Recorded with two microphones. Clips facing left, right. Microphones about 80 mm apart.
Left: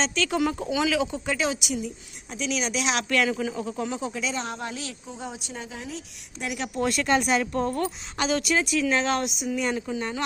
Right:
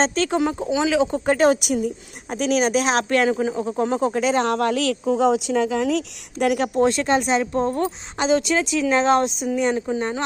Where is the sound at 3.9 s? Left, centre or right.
Right.